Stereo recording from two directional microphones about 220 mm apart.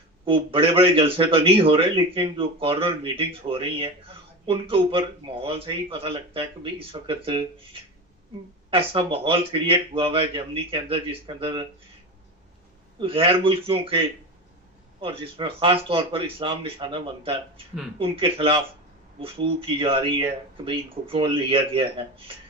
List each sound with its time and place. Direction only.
0.3 s a man's voice: 25° right (ahead or behind)
13.0 s a man's voice: 25° right (ahead or behind)
15.0 s a man's voice: 25° right (ahead or behind)